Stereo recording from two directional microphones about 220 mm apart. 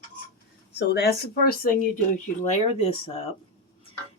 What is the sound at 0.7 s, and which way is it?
Speech, 50° left (ahead or behind).